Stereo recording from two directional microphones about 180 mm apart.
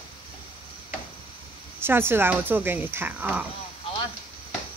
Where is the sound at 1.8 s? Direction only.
10° right (ahead or behind).